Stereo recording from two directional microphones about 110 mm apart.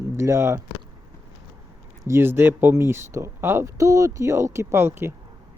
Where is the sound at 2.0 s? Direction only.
20° right (ahead or behind).